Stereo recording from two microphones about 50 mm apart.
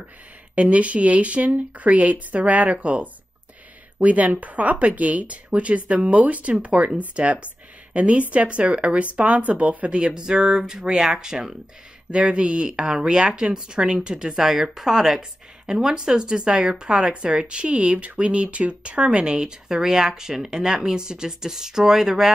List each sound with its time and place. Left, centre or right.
0.6 s speech: right; by 22.3 s centre